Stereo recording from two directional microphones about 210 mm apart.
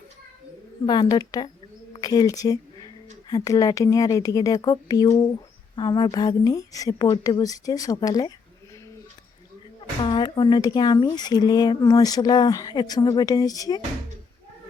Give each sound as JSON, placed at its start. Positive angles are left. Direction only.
{"t": 0.9, "sound": "a woman's voice", "side_deg": 20}
{"t": 10.0, "sound": "speech", "side_deg": 20}